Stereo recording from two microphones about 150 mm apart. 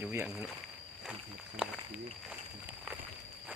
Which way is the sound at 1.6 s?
5° right (ahead or behind).